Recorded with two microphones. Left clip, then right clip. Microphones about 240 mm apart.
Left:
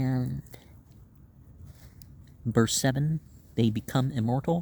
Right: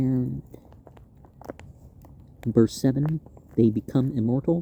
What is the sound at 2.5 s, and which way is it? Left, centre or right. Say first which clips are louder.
Speech: right 4 dB; left.